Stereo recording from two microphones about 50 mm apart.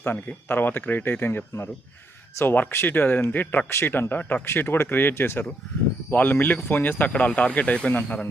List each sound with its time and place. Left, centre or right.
0.4 s speech: left
3.7 s a man's voice: left
4.1 s speech: left
6.1 s speech: left